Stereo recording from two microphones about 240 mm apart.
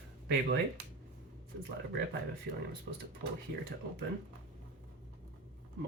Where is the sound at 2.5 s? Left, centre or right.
Right.